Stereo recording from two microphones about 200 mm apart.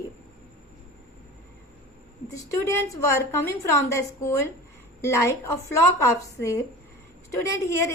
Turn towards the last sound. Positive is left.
turn(degrees=15)  # may be behind; listen again after turning